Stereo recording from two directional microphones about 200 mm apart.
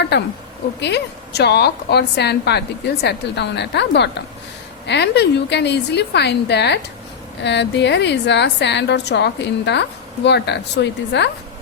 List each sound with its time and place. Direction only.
0.1 s a woman's voice: 60° left (ahead or behind)